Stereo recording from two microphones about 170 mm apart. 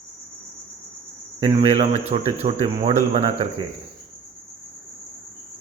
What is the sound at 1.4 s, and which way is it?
Speech, 35° right (ahead or behind).